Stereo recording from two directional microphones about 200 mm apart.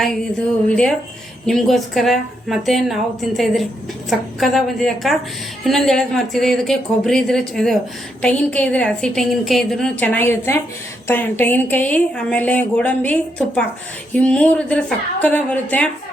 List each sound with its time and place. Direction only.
0.7 s a woman's voice: 5° left (ahead or behind)